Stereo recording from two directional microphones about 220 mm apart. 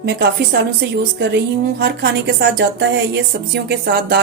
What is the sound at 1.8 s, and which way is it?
A woman's voice, 50° right (ahead or behind).